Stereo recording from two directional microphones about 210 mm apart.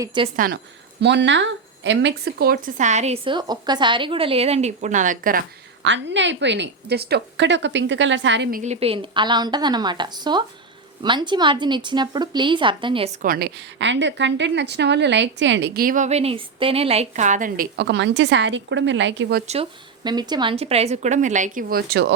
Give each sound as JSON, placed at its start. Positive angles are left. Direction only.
{"t": 0.0, "sound": "a woman's voice", "side_deg": -20}
{"t": 0.3, "sound": "a woman's voice", "side_deg": -45}
{"t": 1.0, "sound": "speech", "side_deg": -55}
{"t": 5.8, "sound": "a woman's voice", "side_deg": -60}
{"t": 13.2, "sound": "a woman's voice", "side_deg": -45}
{"t": 13.7, "sound": "a woman's voice", "side_deg": -60}
{"t": 20.1, "sound": "speech", "side_deg": -20}